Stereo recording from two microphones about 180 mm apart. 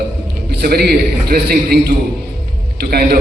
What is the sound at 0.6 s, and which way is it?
A man's voice, 60° right (ahead or behind).